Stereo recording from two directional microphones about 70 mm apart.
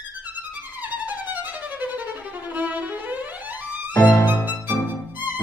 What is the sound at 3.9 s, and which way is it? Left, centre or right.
Music, left.